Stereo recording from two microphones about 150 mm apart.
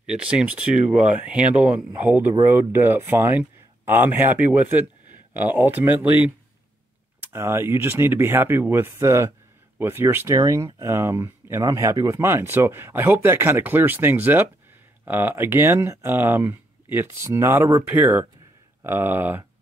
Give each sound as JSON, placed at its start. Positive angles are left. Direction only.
{"t": 0.0, "sound": "a man's voice", "side_deg": -5}